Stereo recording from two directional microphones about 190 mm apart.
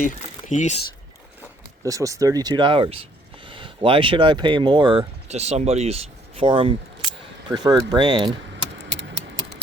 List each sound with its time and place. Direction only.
0.0 s speech: 40° left (ahead or behind)
1.8 s speech: 15° right (ahead or behind)